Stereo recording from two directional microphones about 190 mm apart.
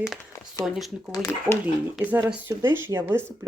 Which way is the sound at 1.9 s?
10° right (ahead or behind).